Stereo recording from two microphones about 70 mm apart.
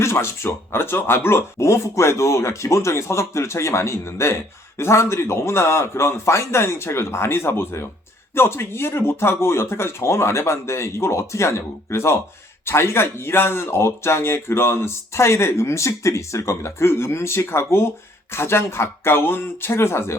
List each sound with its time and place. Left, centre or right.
0.0 s speech: left